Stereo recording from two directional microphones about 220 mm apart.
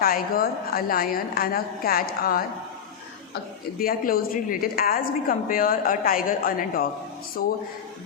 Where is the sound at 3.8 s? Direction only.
40° left (ahead or behind).